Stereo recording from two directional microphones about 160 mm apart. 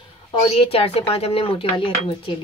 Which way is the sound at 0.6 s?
35° left (ahead or behind).